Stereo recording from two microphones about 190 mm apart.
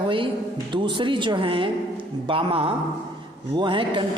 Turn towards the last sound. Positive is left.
turn(degrees=-25)  # may be behind; listen again after turning